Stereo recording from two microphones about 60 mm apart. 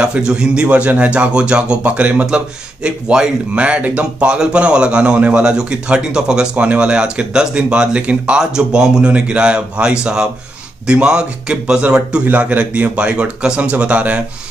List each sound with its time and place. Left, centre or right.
0.0 s a man's voice: centre